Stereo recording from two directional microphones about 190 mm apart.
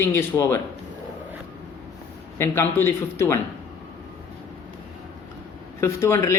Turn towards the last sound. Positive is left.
turn(degrees=15)  # may be behind; listen again after turning